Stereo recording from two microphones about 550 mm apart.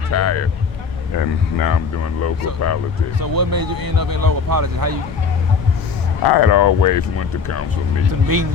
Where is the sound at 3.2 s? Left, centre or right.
Right.